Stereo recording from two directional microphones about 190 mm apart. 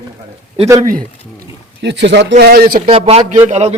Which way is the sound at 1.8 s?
65° right (ahead or behind).